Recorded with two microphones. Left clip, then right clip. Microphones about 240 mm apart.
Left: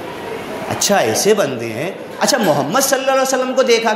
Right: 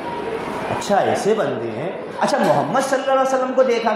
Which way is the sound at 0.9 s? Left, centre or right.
Left.